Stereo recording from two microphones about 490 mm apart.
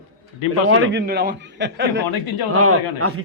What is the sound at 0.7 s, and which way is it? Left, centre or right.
A man's voice, right.